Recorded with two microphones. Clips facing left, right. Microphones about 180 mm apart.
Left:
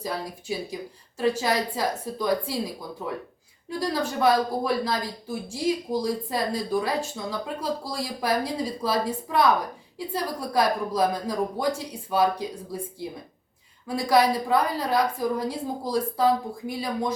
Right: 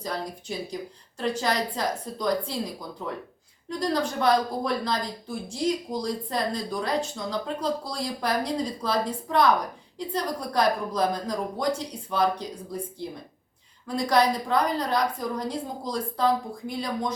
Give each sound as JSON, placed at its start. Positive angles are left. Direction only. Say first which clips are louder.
{"t": 0.0, "sound": "a woman's voice", "louder": "left 1 dB", "side_deg": 5}
{"t": 3.7, "sound": "speech", "louder": "right 1 dB", "side_deg": 5}
{"t": 13.8, "sound": "speech", "louder": "left 1 dB", "side_deg": 5}